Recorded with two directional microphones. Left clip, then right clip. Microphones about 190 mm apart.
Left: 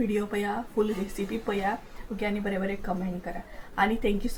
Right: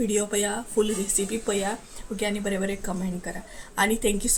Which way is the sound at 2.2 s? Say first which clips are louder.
Right 3 dB; 20° right (ahead or behind).